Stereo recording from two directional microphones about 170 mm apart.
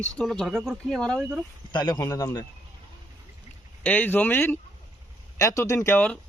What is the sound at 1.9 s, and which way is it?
Speech, 20° left (ahead or behind).